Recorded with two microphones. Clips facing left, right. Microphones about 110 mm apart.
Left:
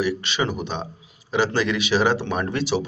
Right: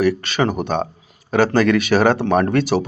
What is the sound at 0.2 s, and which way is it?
Speech, 45° right (ahead or behind).